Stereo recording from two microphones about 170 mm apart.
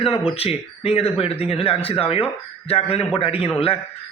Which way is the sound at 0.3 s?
35° left (ahead or behind).